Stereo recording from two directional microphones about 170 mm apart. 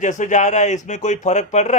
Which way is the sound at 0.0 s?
45° left (ahead or behind).